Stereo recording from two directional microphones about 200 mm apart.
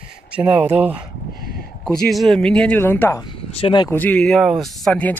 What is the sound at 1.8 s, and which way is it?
Speech, centre (ahead or behind).